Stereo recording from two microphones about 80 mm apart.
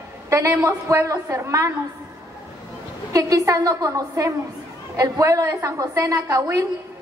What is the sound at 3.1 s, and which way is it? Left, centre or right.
A woman's voice, right.